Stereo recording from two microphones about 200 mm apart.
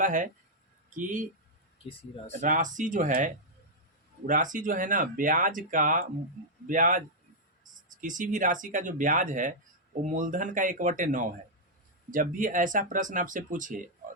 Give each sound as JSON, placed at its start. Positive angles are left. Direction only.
{"t": 0.0, "sound": "speech", "side_deg": -40}
{"t": 2.3, "sound": "speech", "side_deg": -40}
{"t": 8.0, "sound": "speech", "side_deg": -40}